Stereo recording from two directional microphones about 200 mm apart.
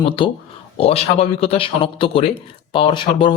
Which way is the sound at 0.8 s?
30° left (ahead or behind).